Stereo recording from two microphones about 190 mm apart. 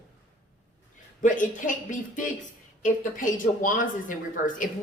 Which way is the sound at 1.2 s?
45° left (ahead or behind).